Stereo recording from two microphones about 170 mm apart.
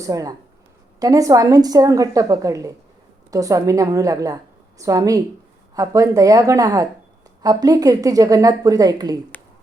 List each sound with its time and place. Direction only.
0.0 s a woman's voice: 20° right (ahead or behind)